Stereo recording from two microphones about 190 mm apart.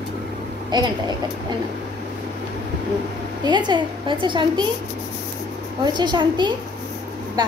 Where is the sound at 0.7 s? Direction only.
20° right (ahead or behind).